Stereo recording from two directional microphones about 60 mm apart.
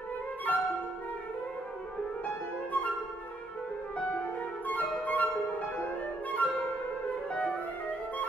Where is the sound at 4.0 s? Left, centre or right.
Left.